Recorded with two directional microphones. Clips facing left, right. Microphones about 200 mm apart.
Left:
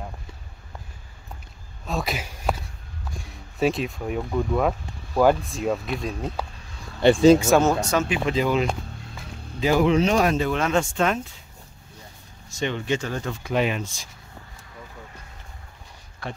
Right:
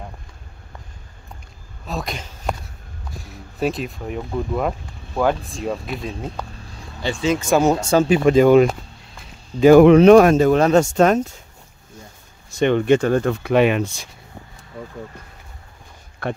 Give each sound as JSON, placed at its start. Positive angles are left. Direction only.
{"t": 1.9, "sound": "speech", "side_deg": 0}
{"t": 3.1, "sound": "a sound", "side_deg": 0}
{"t": 4.3, "sound": "speech", "side_deg": -5}
{"t": 7.0, "sound": "speech", "side_deg": 55}
{"t": 7.3, "sound": "speech", "side_deg": 5}
{"t": 7.6, "sound": "speech", "side_deg": -25}
{"t": 8.3, "sound": "speech", "side_deg": -50}
{"t": 12.4, "sound": "speech", "side_deg": -60}
{"t": 16.2, "sound": "speech", "side_deg": -60}